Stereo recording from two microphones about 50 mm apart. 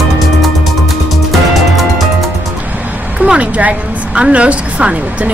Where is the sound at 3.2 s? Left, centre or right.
Right.